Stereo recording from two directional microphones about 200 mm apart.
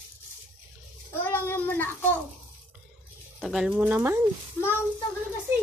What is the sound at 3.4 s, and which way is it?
Speech, centre (ahead or behind).